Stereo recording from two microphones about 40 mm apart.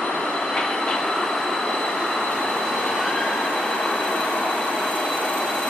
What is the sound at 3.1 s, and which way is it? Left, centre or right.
Train, centre.